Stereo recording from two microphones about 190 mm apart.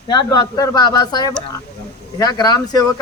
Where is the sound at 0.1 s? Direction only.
20° left (ahead or behind).